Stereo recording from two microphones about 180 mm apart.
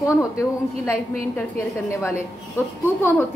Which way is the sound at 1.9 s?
15° left (ahead or behind).